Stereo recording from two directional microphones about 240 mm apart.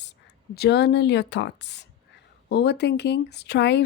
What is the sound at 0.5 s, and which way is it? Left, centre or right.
Speech, left.